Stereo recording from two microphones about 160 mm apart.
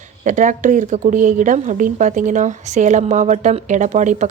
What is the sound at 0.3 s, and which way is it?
A woman's voice, 50° right (ahead or behind).